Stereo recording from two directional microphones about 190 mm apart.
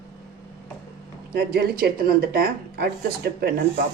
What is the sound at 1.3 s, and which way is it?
Speech, 55° right (ahead or behind).